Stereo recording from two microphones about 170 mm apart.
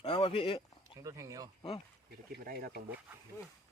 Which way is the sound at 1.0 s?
20° right (ahead or behind).